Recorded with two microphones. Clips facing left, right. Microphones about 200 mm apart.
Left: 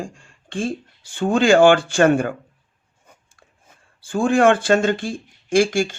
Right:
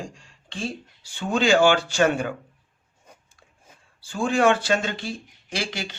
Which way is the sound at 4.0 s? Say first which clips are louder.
Left 5 dB; 50° left (ahead or behind).